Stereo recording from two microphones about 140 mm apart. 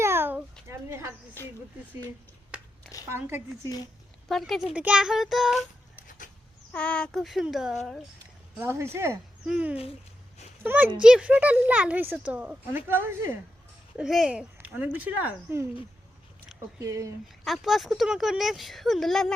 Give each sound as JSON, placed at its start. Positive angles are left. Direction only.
{"t": 0.0, "sound": "a sound", "side_deg": -15}
{"t": 1.4, "sound": "speech", "side_deg": 15}
{"t": 2.5, "sound": "a sound", "side_deg": -10}
{"t": 3.1, "sound": "speech", "side_deg": -15}
{"t": 4.3, "sound": "speech", "side_deg": 0}
{"t": 6.1, "sound": "chicken", "side_deg": 70}
{"t": 6.7, "sound": "speech", "side_deg": 5}
{"t": 8.6, "sound": "speech", "side_deg": -20}
{"t": 9.5, "sound": "speech", "side_deg": -10}
{"t": 14.0, "sound": "speech", "side_deg": -5}
{"t": 16.8, "sound": "speech", "side_deg": -20}
{"t": 17.4, "sound": "speech", "side_deg": 0}